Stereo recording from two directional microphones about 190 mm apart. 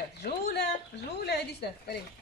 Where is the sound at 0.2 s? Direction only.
60° left (ahead or behind).